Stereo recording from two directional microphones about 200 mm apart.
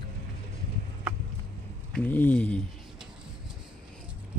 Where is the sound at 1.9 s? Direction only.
10° left (ahead or behind).